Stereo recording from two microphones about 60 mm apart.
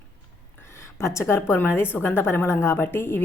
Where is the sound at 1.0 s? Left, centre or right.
Left.